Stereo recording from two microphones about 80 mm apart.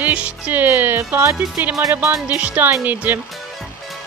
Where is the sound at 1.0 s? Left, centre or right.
Right.